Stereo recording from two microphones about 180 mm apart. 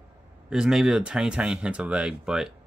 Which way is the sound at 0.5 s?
5° right (ahead or behind).